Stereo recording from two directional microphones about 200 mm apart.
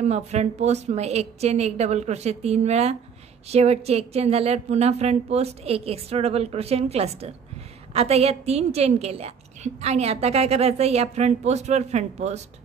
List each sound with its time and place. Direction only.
0.0 s a woman's voice: 35° right (ahead or behind)